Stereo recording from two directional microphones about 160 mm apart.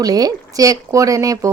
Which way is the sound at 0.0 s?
25° right (ahead or behind).